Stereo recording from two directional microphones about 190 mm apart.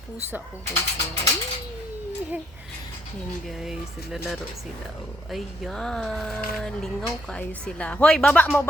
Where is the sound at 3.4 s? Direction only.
Centre (ahead or behind).